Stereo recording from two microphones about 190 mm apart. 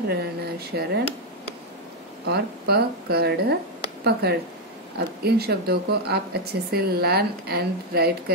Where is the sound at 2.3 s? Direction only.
55° right (ahead or behind).